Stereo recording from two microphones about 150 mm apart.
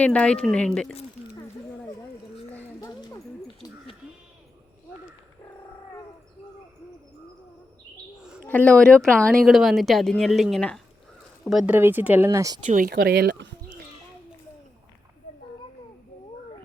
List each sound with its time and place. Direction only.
0.0 s speech: 10° left (ahead or behind)
2.8 s a sound: 25° left (ahead or behind)
8.4 s speech: 10° left (ahead or behind); by 12.5 s 20° right (ahead or behind)
12.6 s speech: 65° right (ahead or behind); by 13.3 s 85° right